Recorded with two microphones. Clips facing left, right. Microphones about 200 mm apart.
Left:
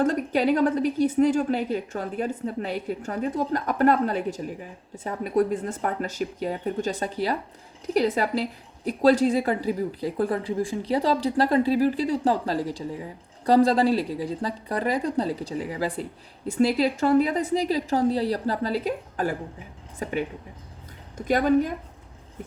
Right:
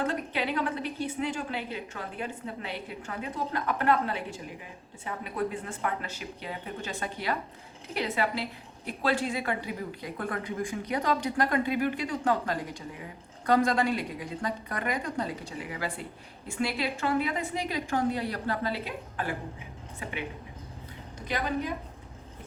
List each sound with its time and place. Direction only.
0.0 s a woman's voice: 40° left (ahead or behind)
21.2 s a woman's voice: 45° left (ahead or behind)